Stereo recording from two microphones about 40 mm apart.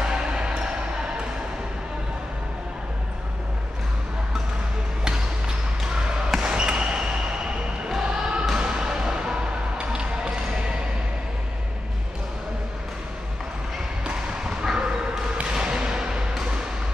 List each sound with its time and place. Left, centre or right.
0.0 s music: centre
6.4 s basketball bounce: right
8.5 s music: centre
14.4 s dog: centre
15.5 s basketball bounce: centre